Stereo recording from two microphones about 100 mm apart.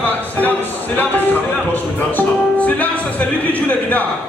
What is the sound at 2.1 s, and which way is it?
Music, 15° left (ahead or behind).